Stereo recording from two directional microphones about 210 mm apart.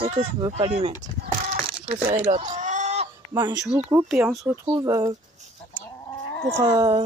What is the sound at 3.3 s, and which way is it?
Speech, 15° right (ahead or behind).